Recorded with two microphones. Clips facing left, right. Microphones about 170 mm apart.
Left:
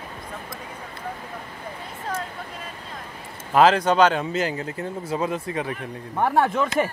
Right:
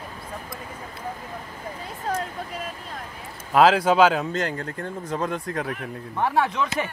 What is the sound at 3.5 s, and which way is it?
Speech, centre (ahead or behind).